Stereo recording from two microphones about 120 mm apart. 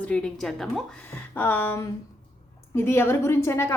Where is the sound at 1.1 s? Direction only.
15° left (ahead or behind).